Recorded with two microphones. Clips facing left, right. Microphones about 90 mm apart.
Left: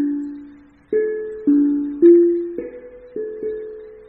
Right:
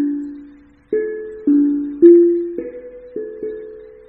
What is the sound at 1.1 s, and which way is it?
Music, 40° left (ahead or behind).